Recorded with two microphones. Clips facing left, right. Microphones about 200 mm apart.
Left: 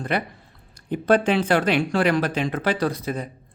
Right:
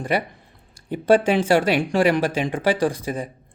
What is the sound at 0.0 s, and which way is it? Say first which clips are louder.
Speech: right 2 dB; 10° right (ahead or behind).